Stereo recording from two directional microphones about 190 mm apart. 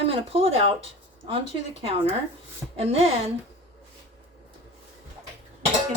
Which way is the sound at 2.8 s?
30° right (ahead or behind).